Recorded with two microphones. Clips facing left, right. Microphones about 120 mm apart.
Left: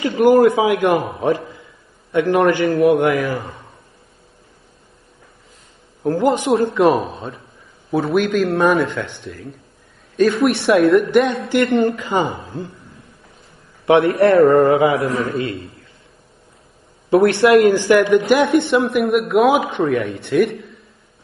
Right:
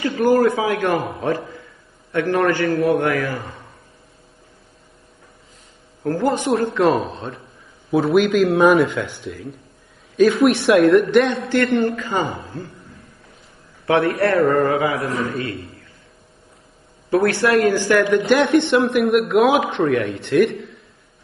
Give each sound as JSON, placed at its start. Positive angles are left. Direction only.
{"t": 0.0, "sound": "a man's voice", "side_deg": 25}
{"t": 6.0, "sound": "a man's voice", "side_deg": 15}
{"t": 6.7, "sound": "a man's voice", "side_deg": 5}
{"t": 11.7, "sound": "a man's voice", "side_deg": 15}
{"t": 13.8, "sound": "a man's voice", "side_deg": 20}
{"t": 17.1, "sound": "a man's voice", "side_deg": 25}
{"t": 18.2, "sound": "a man's voice", "side_deg": 5}